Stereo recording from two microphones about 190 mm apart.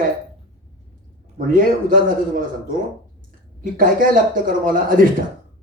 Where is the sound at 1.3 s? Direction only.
45° right (ahead or behind).